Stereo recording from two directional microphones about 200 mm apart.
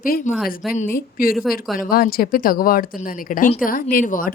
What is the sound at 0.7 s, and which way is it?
A woman's voice, 45° left (ahead or behind).